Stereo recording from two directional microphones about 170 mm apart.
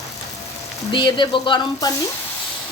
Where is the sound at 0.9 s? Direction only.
25° left (ahead or behind).